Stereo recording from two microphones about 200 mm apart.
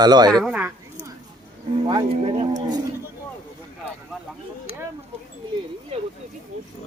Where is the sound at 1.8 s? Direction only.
25° right (ahead or behind).